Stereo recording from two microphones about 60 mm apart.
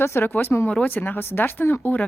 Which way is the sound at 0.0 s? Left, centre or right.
Left.